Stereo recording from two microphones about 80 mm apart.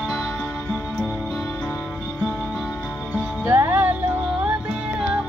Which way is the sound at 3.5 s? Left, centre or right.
Right.